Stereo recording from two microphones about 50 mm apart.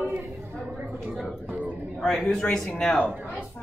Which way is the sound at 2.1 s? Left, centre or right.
Centre.